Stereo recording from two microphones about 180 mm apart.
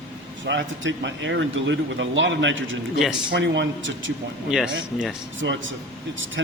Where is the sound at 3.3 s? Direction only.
80° right.